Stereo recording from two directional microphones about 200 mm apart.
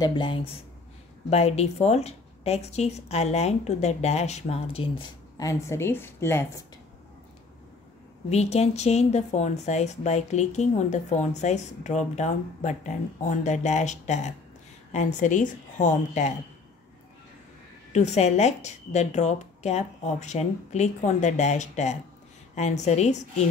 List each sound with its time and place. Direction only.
0.0 s a woman's voice: 25° left (ahead or behind)
8.3 s a woman's voice: 30° left (ahead or behind)
17.9 s a woman's voice: 35° left (ahead or behind)